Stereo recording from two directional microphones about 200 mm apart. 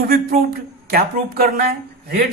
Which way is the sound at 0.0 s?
50° right (ahead or behind).